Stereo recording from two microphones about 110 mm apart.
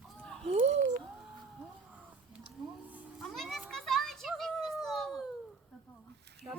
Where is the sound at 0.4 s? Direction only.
70° right (ahead or behind).